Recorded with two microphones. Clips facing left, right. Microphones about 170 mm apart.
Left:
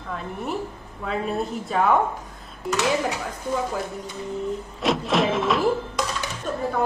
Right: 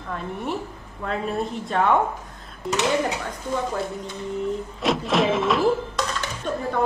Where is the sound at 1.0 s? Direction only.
Centre (ahead or behind).